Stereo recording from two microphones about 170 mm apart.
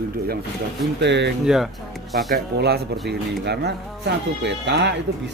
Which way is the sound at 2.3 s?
70° right (ahead or behind).